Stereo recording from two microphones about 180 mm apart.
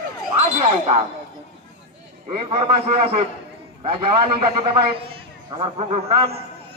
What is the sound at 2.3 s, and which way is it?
A man's voice, 30° right (ahead or behind).